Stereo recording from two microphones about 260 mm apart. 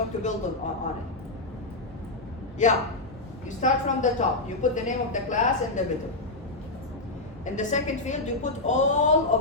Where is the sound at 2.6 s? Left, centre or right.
Left.